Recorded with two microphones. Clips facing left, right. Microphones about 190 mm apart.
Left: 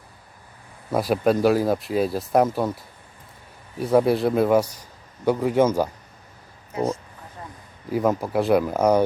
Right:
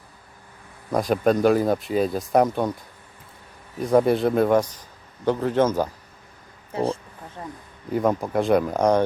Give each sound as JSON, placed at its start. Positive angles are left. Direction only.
{"t": 0.9, "sound": "speech", "side_deg": 5}
{"t": 3.8, "sound": "a man's voice", "side_deg": 5}
{"t": 6.7, "sound": "speech", "side_deg": -30}
{"t": 7.4, "sound": "a sound", "side_deg": -30}
{"t": 7.9, "sound": "speech", "side_deg": 5}